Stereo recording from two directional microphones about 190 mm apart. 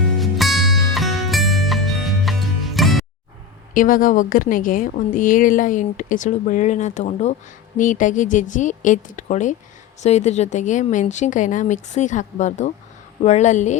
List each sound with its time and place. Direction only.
0.2 s music: centre (ahead or behind)
3.8 s a woman's voice: 45° left (ahead or behind)